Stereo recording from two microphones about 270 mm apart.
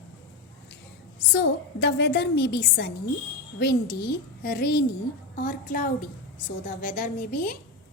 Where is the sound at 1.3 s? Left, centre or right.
Left.